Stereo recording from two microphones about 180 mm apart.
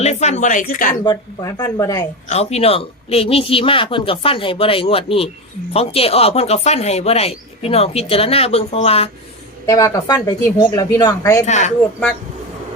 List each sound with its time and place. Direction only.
0.0 s speech: 40° left (ahead or behind)
1.0 s a woman's voice: 20° left (ahead or behind)
2.3 s speech: 35° left (ahead or behind)
9.6 s a woman's voice: 20° left (ahead or behind)
11.4 s speech: 40° left (ahead or behind)